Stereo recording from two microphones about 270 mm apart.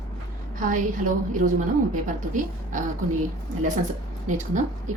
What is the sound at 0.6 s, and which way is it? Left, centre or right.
A woman's voice, right.